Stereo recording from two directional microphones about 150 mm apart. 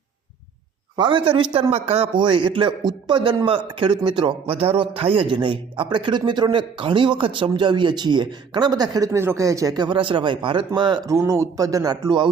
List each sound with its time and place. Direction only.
0.9 s a man's voice: 35° right (ahead or behind)